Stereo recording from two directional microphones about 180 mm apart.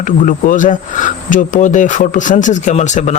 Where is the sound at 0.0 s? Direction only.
45° left (ahead or behind).